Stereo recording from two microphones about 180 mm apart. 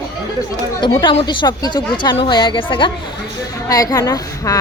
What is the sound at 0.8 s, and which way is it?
A woman's voice, 25° left (ahead or behind).